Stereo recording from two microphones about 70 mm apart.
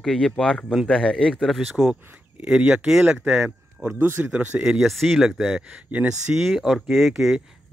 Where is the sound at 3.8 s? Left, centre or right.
Right.